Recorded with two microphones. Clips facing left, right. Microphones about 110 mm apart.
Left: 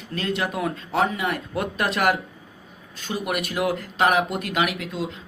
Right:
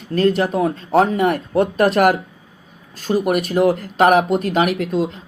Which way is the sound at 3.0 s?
50° right (ahead or behind).